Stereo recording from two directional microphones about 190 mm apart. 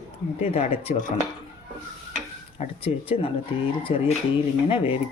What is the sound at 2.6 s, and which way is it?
Speech, 30° left (ahead or behind).